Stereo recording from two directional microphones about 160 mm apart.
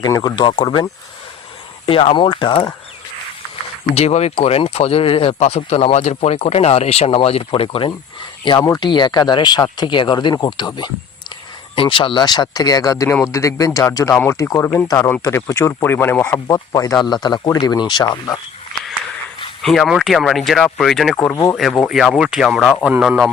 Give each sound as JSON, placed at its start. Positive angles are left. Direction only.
{"t": 0.0, "sound": "speech", "side_deg": 25}
{"t": 1.9, "sound": "speech", "side_deg": 35}
{"t": 3.9, "sound": "speech", "side_deg": 45}
{"t": 19.6, "sound": "speech", "side_deg": 0}
{"t": 21.3, "sound": "speech", "side_deg": 20}
{"t": 21.6, "sound": "speech", "side_deg": 0}